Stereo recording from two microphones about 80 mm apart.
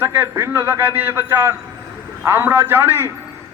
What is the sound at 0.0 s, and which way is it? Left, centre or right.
A man's voice, right.